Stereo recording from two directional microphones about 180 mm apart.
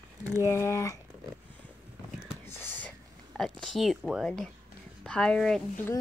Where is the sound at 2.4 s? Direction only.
10° left (ahead or behind).